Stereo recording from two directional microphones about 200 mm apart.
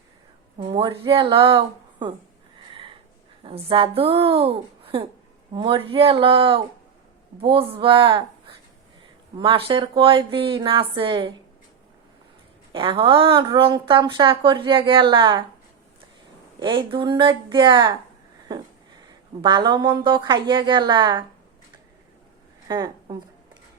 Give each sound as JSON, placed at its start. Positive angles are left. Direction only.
{"t": 0.6, "sound": "speech", "side_deg": -25}
{"t": 3.4, "sound": "speech", "side_deg": -25}
{"t": 7.8, "sound": "speech", "side_deg": -25}
{"t": 12.7, "sound": "speech", "side_deg": -25}
{"t": 16.6, "sound": "speech", "side_deg": -25}
{"t": 19.4, "sound": "speech", "side_deg": -20}
{"t": 22.7, "sound": "a woman's voice", "side_deg": -20}